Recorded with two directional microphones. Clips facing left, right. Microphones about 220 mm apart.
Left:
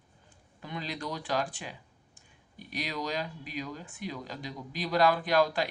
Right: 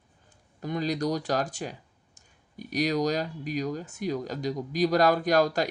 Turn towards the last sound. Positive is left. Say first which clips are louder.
# right 3 dB
turn(degrees=-45)  # may be behind; listen again after turning